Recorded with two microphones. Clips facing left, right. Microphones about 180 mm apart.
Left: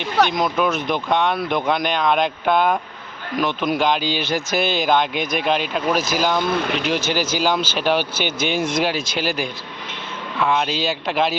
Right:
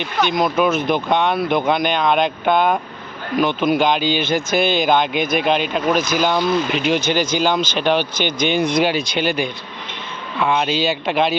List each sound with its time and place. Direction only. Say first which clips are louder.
0.3 s speech: right 3 dB; centre (ahead or behind)
6.4 s speech: right 3 dB; 55° left (ahead or behind)
6.7 s speech: right 3 dB; centre (ahead or behind)